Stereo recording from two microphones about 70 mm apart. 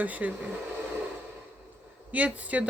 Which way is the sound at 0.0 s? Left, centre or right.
Right.